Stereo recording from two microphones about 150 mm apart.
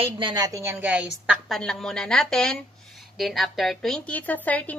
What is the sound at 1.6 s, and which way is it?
A woman's voice, 5° left (ahead or behind).